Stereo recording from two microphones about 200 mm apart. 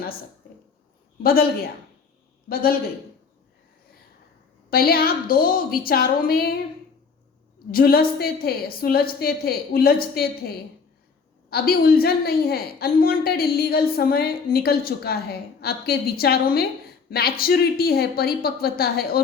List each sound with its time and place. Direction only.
1.2 s a woman's voice: 50° left (ahead or behind)
4.7 s a woman's voice: 50° left (ahead or behind)
7.7 s a woman's voice: 50° left (ahead or behind)